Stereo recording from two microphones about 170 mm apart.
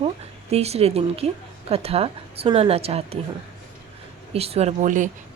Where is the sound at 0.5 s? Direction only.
40° right (ahead or behind).